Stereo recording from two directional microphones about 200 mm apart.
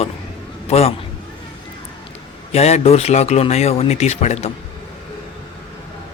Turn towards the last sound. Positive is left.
turn(degrees=35)  # may be behind; listen again after turning